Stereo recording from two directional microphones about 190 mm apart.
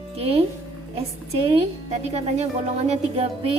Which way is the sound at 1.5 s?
35° right (ahead or behind).